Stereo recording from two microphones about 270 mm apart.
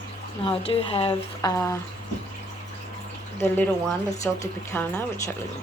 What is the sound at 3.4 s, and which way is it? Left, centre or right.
Speech, centre.